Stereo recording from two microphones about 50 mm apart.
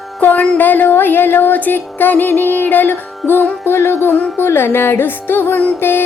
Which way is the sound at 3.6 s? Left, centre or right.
Left.